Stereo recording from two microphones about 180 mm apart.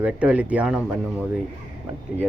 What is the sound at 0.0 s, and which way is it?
Speech, 5° right (ahead or behind).